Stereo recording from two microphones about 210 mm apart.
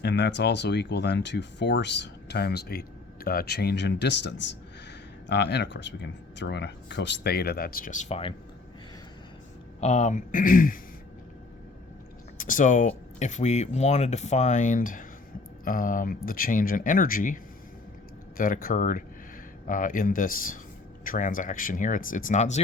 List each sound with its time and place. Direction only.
0.0 s speech: 55° left (ahead or behind); by 8.3 s 30° left (ahead or behind)
9.8 s speech: 35° left (ahead or behind)
12.4 s a sound: 40° left (ahead or behind)
13.1 s speech: 35° left (ahead or behind)